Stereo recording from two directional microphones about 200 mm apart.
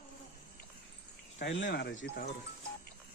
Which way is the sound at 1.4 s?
65° left (ahead or behind).